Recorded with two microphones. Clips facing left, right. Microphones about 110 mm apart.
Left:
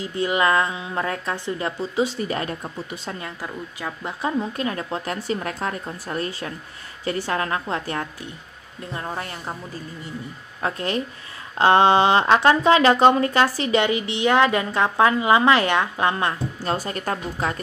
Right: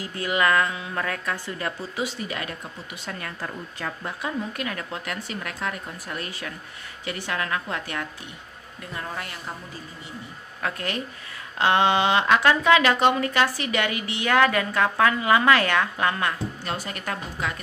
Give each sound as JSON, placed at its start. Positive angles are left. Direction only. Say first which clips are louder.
{"t": 0.0, "sound": "a woman's voice", "louder": "left 3 dB", "side_deg": 25}
{"t": 2.1, "sound": "speech", "louder": "left 6 dB", "side_deg": 35}
{"t": 3.4, "sound": "speech", "louder": "left 1 dB", "side_deg": 10}
{"t": 4.2, "sound": "a woman's voice", "louder": "left 6 dB", "side_deg": 30}
{"t": 10.6, "sound": "a woman's voice", "louder": "left 4 dB", "side_deg": 25}